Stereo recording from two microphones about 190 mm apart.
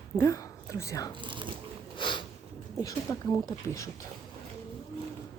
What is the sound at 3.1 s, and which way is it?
Speech, 15° left (ahead or behind).